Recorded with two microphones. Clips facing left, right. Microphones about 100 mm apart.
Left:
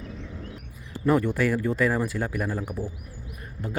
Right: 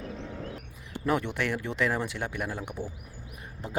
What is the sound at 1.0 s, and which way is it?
Speech, centre (ahead or behind).